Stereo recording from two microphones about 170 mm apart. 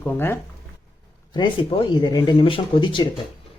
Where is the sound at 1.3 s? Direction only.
25° left (ahead or behind).